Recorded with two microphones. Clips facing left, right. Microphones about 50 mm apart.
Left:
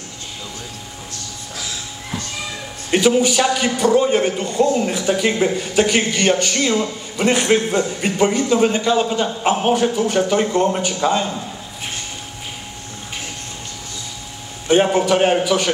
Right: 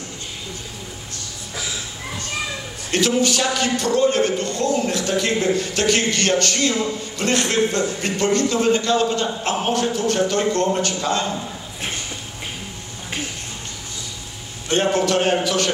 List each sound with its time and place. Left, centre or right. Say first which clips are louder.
2.9 s a man's voice: left 4 dB; centre
14.7 s a man's voice: left 4 dB; centre